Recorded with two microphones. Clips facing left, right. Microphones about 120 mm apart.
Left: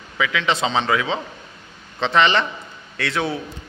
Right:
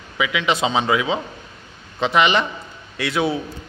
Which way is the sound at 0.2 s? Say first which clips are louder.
Right 1 dB; 15° right (ahead or behind).